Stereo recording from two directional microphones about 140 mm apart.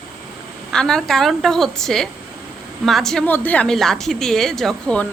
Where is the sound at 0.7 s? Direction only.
5° left (ahead or behind).